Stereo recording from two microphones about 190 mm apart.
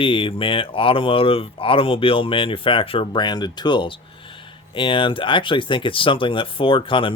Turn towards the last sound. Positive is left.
turn(degrees=25)  # may be behind; listen again after turning